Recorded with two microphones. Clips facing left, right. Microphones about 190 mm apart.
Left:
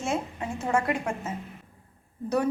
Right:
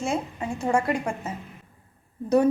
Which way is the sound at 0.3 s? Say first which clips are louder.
Right 3 dB; 15° right (ahead or behind).